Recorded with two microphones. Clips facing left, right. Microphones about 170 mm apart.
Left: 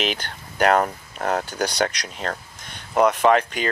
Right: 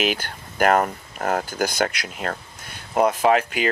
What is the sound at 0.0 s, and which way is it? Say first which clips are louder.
Speech: right 2 dB; 5° right (ahead or behind).